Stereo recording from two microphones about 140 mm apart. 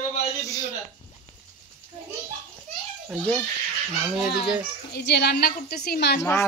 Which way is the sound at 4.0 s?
10° right (ahead or behind).